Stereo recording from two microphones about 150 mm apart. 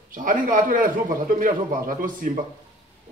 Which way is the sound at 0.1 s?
65° right (ahead or behind).